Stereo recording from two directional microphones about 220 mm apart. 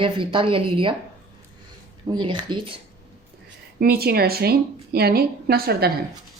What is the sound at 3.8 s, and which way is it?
A woman's voice, 45° right (ahead or behind).